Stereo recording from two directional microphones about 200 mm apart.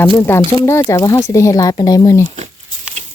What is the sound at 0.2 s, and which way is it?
Speech, 10° left (ahead or behind).